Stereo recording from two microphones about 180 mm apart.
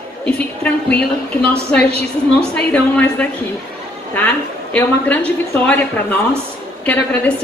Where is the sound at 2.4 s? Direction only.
10° left (ahead or behind).